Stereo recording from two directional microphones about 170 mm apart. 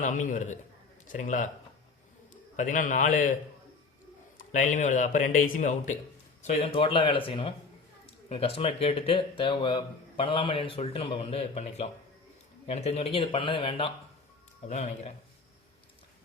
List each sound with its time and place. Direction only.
0.0 s a man's voice: 50° left (ahead or behind)
4.4 s a man's voice: 50° left (ahead or behind)
6.7 s speech: 30° left (ahead or behind)
14.7 s speech: 40° left (ahead or behind)